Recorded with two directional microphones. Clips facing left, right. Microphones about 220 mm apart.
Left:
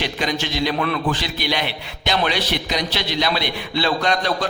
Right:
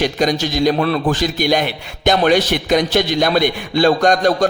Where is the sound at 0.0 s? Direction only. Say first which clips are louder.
Right 7 dB; 45° right (ahead or behind).